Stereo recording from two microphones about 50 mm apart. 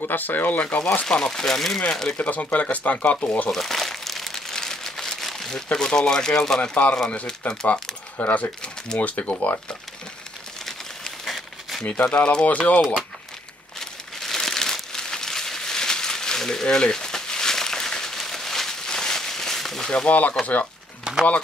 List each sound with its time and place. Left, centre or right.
0.0 s speech: left
1.0 s speech: centre
2.1 s speech: left
3.5 s crumpling: centre
5.7 s speech: centre
6.7 s speech: left
10.6 s a sound: centre
11.8 s speech: left
13.7 s crumpling: centre
19.9 s speech: left
21.0 s a sound: centre